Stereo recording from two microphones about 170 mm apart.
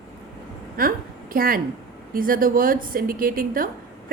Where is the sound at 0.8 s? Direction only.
60° right (ahead or behind).